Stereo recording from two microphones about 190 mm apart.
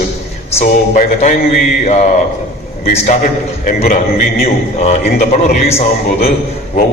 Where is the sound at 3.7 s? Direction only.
50° left (ahead or behind).